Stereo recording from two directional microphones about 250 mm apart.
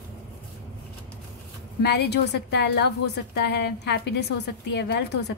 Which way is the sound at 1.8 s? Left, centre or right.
Left.